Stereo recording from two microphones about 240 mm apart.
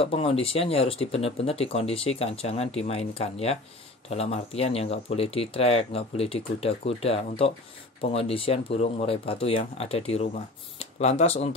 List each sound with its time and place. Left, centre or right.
0.0 s speech: left